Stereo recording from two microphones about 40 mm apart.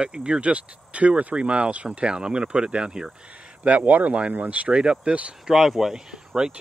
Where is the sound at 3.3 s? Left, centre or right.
Right.